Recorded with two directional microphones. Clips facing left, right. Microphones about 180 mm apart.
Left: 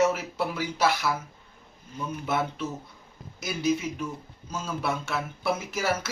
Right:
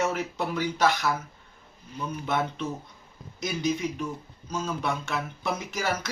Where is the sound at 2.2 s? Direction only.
5° left (ahead or behind).